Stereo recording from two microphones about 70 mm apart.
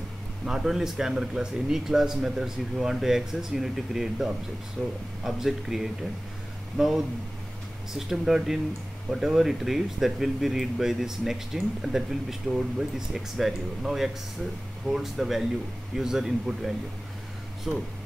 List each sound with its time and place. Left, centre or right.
0.5 s speech: centre
4.8 s speech: centre
5.2 s speech: centre
7.9 s speech: centre